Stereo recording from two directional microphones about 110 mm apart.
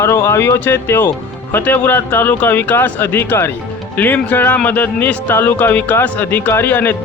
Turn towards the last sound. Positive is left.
turn(degrees=15)  # may be behind; listen again after turning